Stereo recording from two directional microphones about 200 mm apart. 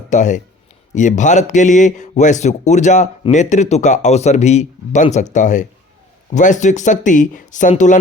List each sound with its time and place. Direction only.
0.1 s a man's voice: 40° left (ahead or behind)